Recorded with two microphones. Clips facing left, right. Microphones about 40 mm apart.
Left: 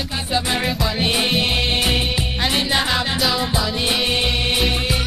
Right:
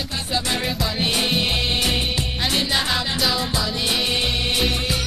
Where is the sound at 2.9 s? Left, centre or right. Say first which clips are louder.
Left 2 dB; centre.